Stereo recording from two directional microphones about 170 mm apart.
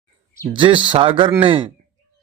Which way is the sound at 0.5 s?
30° right (ahead or behind).